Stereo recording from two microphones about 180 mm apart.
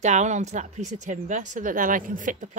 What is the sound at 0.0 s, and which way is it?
A woman's voice, 40° right (ahead or behind).